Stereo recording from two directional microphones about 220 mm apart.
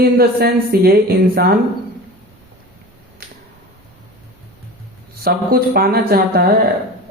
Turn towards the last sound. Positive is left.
turn(degrees=-45)  # may be behind; listen again after turning